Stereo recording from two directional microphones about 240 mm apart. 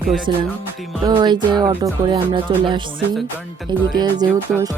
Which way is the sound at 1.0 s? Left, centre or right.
Centre.